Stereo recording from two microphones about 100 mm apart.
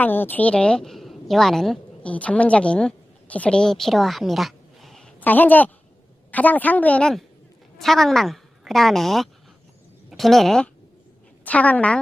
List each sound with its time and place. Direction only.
0.0 s a woman's voice: 20° left (ahead or behind); by 5.1 s 5° left (ahead or behind)
5.2 s speech: 15° left (ahead or behind)
7.8 s speech: 5° left (ahead or behind)
11.4 s speech: 15° left (ahead or behind)